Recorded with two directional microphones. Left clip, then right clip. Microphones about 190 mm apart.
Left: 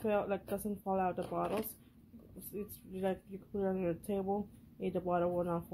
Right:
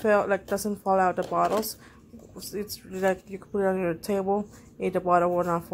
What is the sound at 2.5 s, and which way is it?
Speech, 20° right (ahead or behind).